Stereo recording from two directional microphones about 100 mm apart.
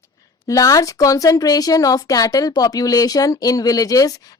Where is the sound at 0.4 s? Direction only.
35° left (ahead or behind).